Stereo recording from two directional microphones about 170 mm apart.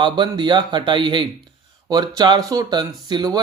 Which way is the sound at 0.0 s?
25° right (ahead or behind).